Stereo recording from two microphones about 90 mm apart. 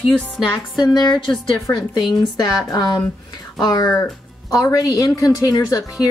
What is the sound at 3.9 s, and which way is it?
Speech, 35° left (ahead or behind).